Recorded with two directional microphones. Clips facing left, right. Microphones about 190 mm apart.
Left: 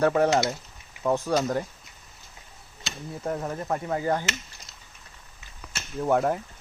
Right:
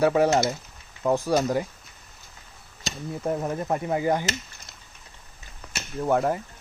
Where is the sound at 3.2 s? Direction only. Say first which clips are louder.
Right 3 dB; 15° right (ahead or behind).